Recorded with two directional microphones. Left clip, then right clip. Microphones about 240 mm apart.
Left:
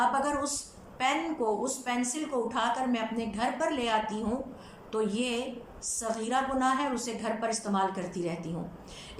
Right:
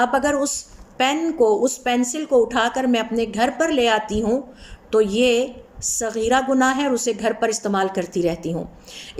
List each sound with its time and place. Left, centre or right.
0.0 s a woman's voice: right